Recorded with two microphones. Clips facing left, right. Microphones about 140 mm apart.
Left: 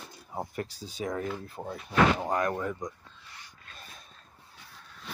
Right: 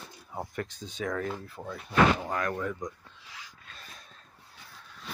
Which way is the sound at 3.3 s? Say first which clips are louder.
Right 4 dB; 90° right.